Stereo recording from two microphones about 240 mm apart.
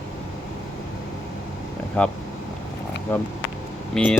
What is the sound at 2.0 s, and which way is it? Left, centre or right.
Speech, centre.